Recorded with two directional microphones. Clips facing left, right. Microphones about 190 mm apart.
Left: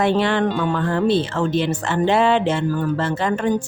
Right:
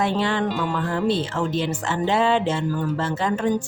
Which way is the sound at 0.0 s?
65° left (ahead or behind).